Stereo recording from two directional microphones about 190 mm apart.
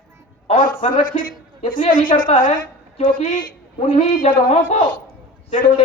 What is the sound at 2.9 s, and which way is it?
A man's voice, 30° left (ahead or behind).